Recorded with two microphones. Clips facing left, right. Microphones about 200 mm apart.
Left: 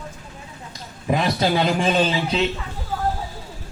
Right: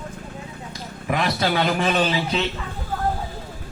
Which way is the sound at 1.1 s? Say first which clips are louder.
Left 2 dB; 20° left (ahead or behind).